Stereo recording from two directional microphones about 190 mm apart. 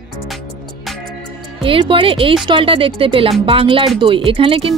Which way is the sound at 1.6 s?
30° right (ahead or behind).